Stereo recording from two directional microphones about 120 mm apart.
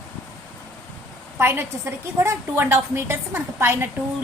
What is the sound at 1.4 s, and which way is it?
A woman's voice, 20° right (ahead or behind).